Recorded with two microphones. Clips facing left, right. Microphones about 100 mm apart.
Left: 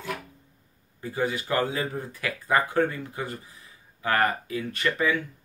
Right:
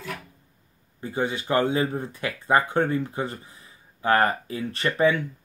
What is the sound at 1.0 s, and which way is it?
Speech, 25° right (ahead or behind).